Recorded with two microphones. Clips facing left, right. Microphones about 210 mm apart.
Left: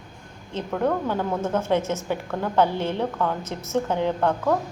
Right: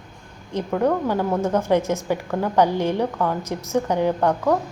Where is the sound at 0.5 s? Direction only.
10° right (ahead or behind).